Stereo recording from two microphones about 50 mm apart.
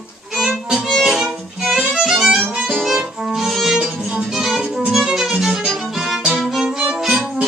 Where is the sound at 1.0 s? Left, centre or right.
Centre.